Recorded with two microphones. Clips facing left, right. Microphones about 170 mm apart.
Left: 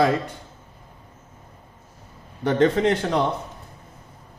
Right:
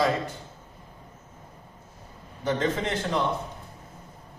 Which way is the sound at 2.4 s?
65° left (ahead or behind).